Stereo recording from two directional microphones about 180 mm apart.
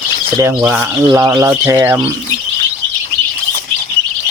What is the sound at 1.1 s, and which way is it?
Speech, 20° right (ahead or behind).